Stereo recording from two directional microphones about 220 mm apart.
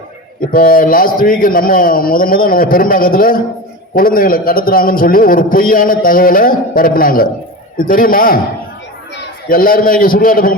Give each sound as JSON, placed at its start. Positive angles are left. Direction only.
{"t": 0.5, "sound": "a man's voice", "side_deg": 40}
{"t": 9.5, "sound": "a man's voice", "side_deg": 40}